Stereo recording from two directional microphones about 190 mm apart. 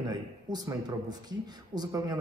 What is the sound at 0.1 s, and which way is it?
Speech, 20° right (ahead or behind).